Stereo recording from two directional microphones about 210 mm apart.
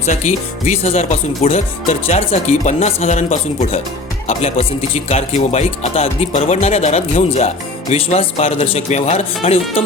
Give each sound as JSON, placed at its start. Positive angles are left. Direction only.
{"t": 0.0, "sound": "speech", "side_deg": 35}